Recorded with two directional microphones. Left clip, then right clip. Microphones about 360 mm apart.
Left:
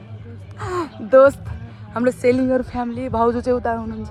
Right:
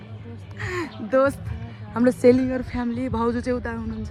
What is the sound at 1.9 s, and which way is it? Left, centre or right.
Speech, centre.